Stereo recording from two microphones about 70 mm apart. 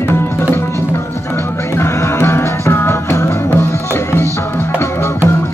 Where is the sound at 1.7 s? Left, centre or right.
Left.